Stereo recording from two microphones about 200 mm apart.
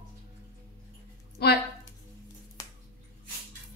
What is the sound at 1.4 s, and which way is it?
Speech, 55° left (ahead or behind).